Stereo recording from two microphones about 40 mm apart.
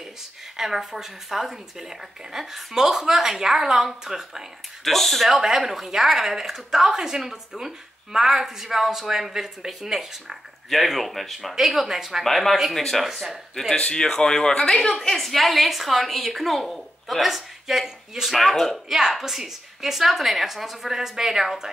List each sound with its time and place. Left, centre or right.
0.6 s speech: centre
4.8 s a woman's voice: centre
5.3 s speech: centre
11.5 s speech: centre
12.2 s a woman's voice: centre
13.7 s a woman's voice: left; by 18.9 s centre
18.9 s speech: centre